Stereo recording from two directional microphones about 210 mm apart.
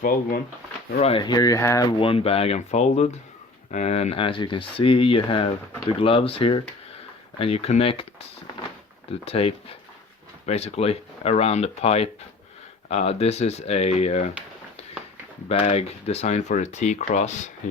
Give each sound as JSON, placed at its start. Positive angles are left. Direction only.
{"t": 0.0, "sound": "speech", "side_deg": 45}
{"t": 0.9, "sound": "speech", "side_deg": 25}
{"t": 9.2, "sound": "speech", "side_deg": 30}
{"t": 15.4, "sound": "speech", "side_deg": 30}